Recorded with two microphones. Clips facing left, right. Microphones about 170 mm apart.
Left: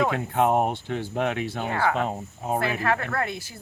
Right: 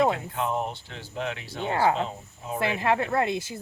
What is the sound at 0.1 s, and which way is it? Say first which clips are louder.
Speech: left 6 dB; 60° left (ahead or behind).